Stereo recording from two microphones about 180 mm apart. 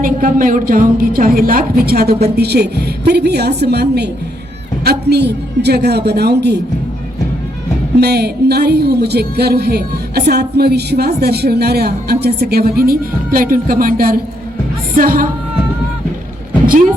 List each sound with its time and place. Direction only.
0.0 s a woman's voice: 50° right (ahead or behind)
8.0 s a woman's voice: 60° right (ahead or behind)